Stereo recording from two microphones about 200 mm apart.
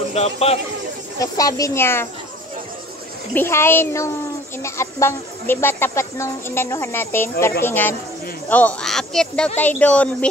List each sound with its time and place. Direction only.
0.1 s speech: 30° left (ahead or behind)
1.2 s speech: 15° left (ahead or behind)
3.3 s speech: 10° left (ahead or behind)